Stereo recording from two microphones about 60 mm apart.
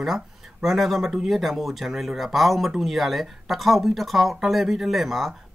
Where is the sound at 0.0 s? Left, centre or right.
Centre.